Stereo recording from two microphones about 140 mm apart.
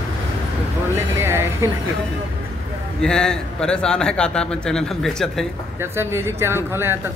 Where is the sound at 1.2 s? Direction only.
20° right (ahead or behind).